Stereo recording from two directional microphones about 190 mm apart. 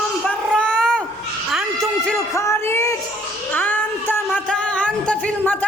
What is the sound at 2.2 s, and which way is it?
Music, 15° left (ahead or behind).